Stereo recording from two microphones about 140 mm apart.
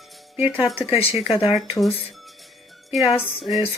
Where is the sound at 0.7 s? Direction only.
45° left (ahead or behind).